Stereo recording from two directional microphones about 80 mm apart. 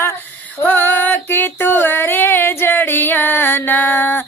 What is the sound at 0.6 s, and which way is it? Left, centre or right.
Female singing, left.